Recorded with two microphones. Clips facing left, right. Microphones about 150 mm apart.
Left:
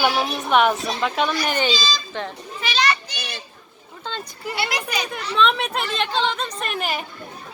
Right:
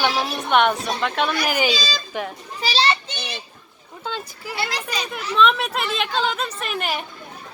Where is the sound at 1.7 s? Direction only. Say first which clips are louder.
Left 1 dB; 60° right (ahead or behind).